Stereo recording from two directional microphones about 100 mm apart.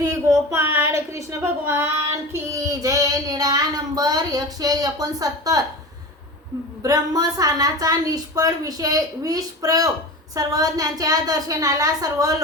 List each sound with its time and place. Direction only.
0.0 s speech: 30° right (ahead or behind)
2.3 s child singing: 35° right (ahead or behind)
6.8 s child singing: 40° right (ahead or behind)